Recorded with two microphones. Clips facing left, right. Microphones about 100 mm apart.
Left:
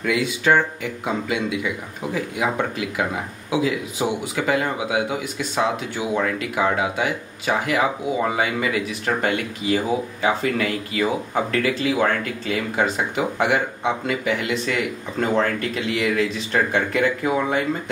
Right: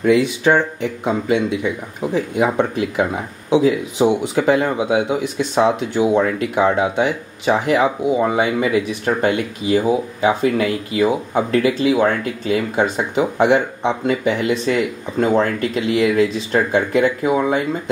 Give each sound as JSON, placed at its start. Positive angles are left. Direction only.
{"t": 0.0, "sound": "speech", "side_deg": -25}